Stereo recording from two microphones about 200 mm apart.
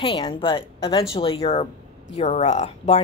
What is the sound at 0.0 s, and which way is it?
A woman's voice, 25° left (ahead or behind).